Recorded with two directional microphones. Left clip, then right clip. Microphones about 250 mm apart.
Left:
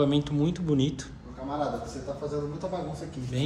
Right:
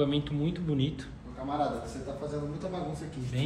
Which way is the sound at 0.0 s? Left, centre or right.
Centre.